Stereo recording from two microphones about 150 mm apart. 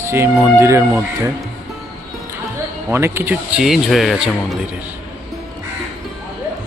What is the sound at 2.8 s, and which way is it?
Speech, 15° right (ahead or behind).